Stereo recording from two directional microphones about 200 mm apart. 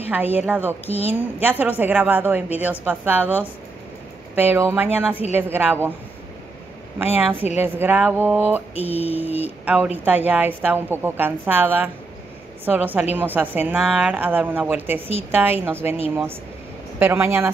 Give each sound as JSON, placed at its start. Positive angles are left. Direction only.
{"t": 0.1, "sound": "a woman's voice", "side_deg": -10}
{"t": 7.0, "sound": "a woman's voice", "side_deg": -10}
{"t": 8.8, "sound": "a sound", "side_deg": 30}
{"t": 9.1, "sound": "a woman's voice", "side_deg": -10}
{"t": 17.0, "sound": "a woman's voice", "side_deg": -10}